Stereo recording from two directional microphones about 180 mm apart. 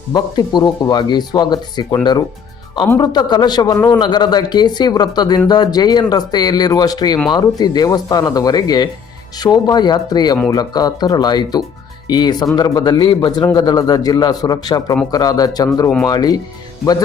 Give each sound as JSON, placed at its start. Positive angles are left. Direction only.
{"t": 0.1, "sound": "a man's voice", "side_deg": 20}
{"t": 2.8, "sound": "speech", "side_deg": 15}
{"t": 3.1, "sound": "a man's voice", "side_deg": 25}